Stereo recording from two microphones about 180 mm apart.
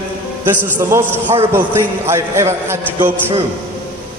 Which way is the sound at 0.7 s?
10° right (ahead or behind).